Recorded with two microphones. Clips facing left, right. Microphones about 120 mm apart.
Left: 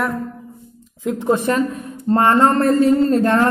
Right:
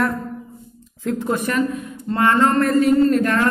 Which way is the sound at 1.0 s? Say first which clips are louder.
Left 4 dB; 20° left (ahead or behind).